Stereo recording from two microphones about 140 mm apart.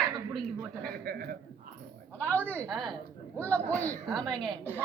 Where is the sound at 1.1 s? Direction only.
90° right.